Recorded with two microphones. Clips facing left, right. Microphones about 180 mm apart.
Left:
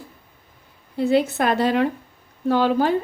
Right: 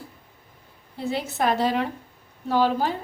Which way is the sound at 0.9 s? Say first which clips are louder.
Left 8 dB; 65° left (ahead or behind).